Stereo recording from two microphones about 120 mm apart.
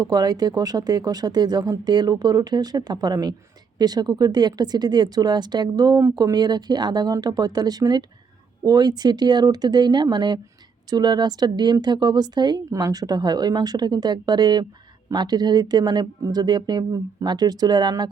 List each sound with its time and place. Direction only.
0.0 s speech: 35° right (ahead or behind)